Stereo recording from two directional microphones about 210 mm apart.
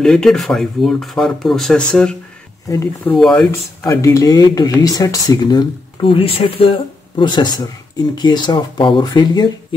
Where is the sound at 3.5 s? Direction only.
15° left (ahead or behind).